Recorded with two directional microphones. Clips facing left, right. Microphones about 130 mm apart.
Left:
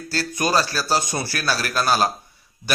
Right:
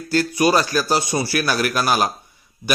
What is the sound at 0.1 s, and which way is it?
Speech, 15° right (ahead or behind).